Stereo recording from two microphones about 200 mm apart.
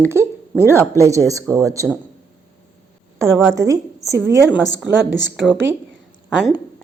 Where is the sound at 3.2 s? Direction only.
15° right (ahead or behind).